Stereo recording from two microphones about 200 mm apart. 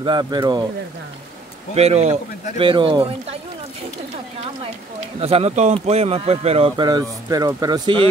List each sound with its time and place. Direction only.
0.0 s speech: 20° right (ahead or behind)
1.8 s speech: 30° right (ahead or behind)
5.2 s speech: 30° right (ahead or behind)